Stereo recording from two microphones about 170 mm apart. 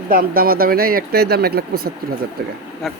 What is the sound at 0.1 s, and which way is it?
Speech, 60° right (ahead or behind).